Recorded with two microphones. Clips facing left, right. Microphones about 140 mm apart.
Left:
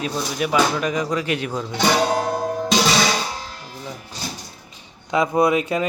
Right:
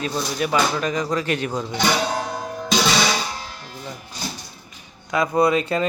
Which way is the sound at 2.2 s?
55° left (ahead or behind).